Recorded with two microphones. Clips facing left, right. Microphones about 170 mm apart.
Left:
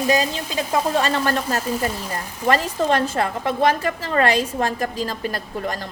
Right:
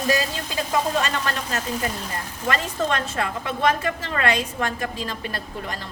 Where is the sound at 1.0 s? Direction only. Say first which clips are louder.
Left 5 dB; 35° left (ahead or behind).